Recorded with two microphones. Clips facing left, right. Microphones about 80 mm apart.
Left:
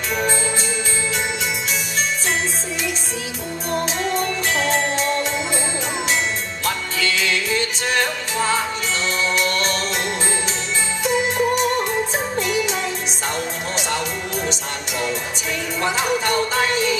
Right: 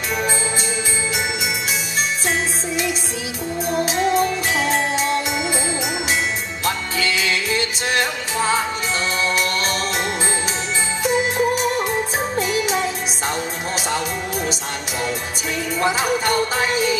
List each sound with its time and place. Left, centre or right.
3.7 s music: centre
6.6 s music: centre
11.1 s music: centre